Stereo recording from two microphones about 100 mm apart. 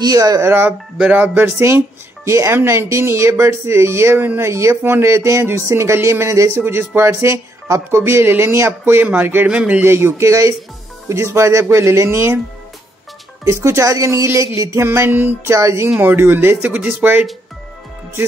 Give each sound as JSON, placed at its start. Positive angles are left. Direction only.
{"t": 0.0, "sound": "speech", "side_deg": -40}
{"t": 0.5, "sound": "speech", "side_deg": -20}
{"t": 9.9, "sound": "speech", "side_deg": -25}
{"t": 13.5, "sound": "speech", "side_deg": -30}